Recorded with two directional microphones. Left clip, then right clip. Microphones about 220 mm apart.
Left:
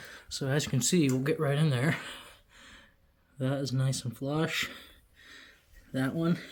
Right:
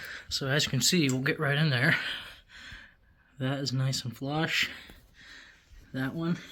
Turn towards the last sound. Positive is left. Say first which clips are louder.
# left 2 dB
turn(degrees=5)  # may be behind; listen again after turning